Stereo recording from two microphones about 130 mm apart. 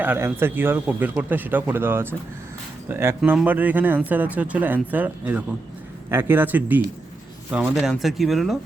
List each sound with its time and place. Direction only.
0.0 s speech: 15° right (ahead or behind)
3.2 s speech: 10° right (ahead or behind)